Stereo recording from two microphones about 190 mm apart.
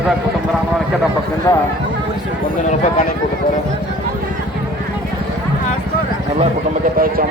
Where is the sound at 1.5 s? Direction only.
20° left (ahead or behind).